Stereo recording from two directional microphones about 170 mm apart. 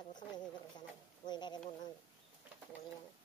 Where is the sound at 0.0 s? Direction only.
25° left (ahead or behind).